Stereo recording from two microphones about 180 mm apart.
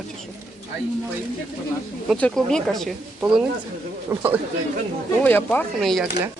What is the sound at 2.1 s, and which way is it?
Speech, 5° left (ahead or behind).